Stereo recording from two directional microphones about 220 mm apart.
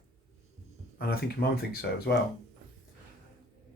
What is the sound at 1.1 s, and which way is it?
Speech, 45° left (ahead or behind).